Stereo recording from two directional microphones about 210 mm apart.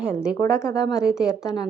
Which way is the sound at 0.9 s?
5° right (ahead or behind).